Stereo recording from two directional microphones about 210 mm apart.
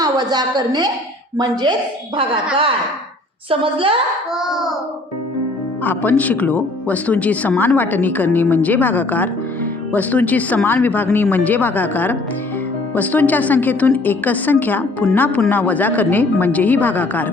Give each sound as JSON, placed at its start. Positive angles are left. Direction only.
{"t": 0.0, "sound": "a woman's voice", "side_deg": -20}
{"t": 3.5, "sound": "a woman's voice", "side_deg": -25}
{"t": 4.4, "sound": "child singing", "side_deg": 0}
{"t": 5.8, "sound": "a woman's voice", "side_deg": 10}